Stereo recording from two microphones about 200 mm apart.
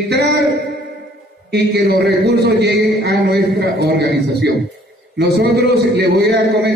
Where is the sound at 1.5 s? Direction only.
55° right (ahead or behind).